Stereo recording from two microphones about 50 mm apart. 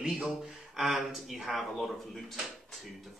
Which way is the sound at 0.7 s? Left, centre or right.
Centre.